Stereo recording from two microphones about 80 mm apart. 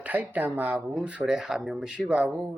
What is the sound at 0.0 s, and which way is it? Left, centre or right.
Speech, right.